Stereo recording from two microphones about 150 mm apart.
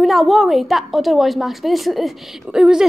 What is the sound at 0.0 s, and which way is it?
A woman's voice, centre (ahead or behind).